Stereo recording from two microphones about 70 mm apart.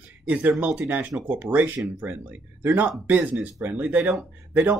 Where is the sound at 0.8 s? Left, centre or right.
Right.